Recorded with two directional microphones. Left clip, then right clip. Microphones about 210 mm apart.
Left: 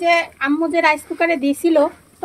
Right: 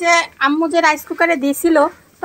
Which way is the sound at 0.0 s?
20° right (ahead or behind).